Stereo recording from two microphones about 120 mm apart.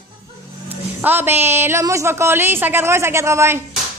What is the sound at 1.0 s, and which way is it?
A woman's voice, 20° right (ahead or behind).